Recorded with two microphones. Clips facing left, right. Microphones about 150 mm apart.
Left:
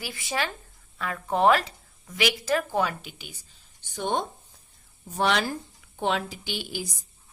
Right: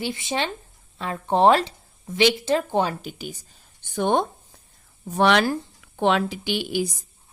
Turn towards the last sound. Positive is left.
turn(degrees=-65)  # may be behind; listen again after turning